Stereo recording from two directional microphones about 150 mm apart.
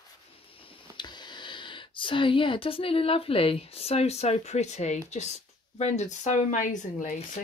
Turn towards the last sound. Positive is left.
turn(degrees=60)  # may be behind; listen again after turning